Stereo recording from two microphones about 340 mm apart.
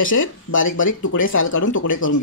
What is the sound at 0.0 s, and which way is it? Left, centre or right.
Speech, left.